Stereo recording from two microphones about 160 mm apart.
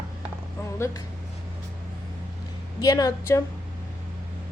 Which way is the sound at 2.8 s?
25° left (ahead or behind).